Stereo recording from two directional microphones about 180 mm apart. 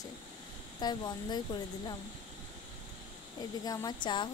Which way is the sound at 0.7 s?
25° left (ahead or behind).